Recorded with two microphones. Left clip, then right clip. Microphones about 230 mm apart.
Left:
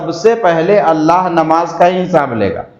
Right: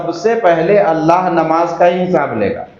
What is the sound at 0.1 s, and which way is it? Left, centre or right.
A man's voice, left.